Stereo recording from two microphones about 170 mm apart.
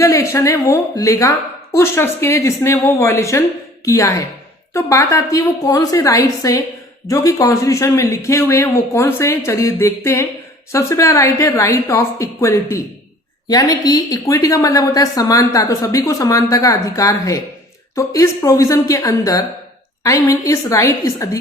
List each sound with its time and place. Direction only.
0.0 s a woman's voice: 15° left (ahead or behind)